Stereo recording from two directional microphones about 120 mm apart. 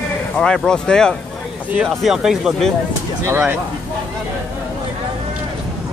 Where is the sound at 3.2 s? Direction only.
20° right (ahead or behind).